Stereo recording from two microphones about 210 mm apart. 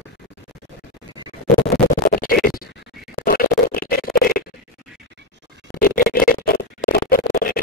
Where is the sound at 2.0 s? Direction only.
45° left (ahead or behind).